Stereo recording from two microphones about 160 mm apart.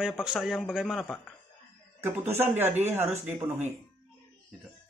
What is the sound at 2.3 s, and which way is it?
A man's voice, 15° right (ahead or behind).